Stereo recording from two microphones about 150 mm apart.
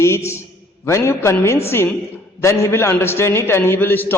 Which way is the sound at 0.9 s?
20° left (ahead or behind).